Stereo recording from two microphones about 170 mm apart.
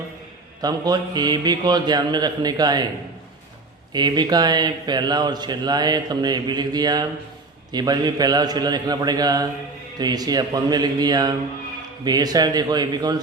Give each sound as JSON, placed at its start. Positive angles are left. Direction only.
{"t": 0.6, "sound": "speech", "side_deg": -25}
{"t": 3.9, "sound": "speech", "side_deg": -25}